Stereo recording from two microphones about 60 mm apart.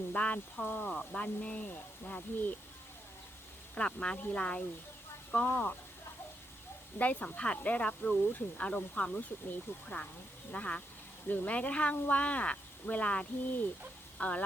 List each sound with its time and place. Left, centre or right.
0.1 s speech: left
0.9 s a sound: centre
1.2 s speech: centre
3.8 s speech: centre
5.5 s speech: left
7.0 s speech: left
8.6 s speech: centre